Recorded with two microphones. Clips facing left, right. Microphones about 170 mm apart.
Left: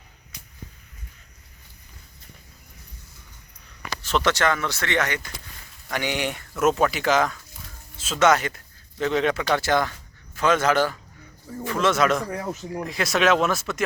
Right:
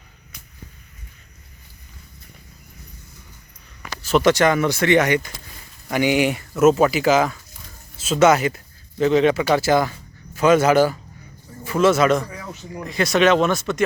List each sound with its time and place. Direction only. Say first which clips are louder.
4.0 s speech: right 6 dB; 10° right (ahead or behind)
12.3 s speech: left 5 dB; 55° left (ahead or behind)
12.7 s speech: right 6 dB; centre (ahead or behind)